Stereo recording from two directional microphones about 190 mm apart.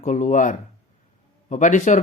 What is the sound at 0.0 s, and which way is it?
Speech, 40° left (ahead or behind).